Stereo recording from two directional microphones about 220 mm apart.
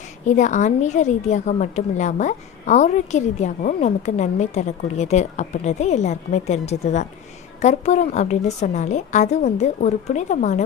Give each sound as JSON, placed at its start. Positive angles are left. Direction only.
{"t": 0.3, "sound": "a woman's voice", "side_deg": 35}